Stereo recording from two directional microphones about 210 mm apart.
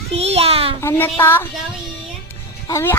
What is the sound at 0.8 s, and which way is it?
Child singing, 10° left (ahead or behind).